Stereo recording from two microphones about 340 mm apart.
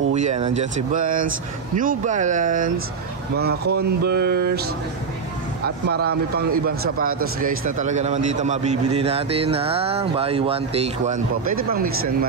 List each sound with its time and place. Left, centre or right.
0.1 s speech: centre
5.9 s speech: right
7.4 s a man's voice: right